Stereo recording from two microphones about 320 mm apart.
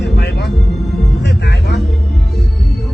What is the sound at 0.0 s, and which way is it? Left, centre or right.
Music, left.